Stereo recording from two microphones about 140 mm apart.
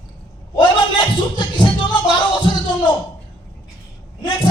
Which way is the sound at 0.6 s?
35° left (ahead or behind).